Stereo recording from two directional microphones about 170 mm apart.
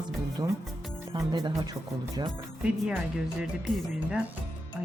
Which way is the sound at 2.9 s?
5° right (ahead or behind).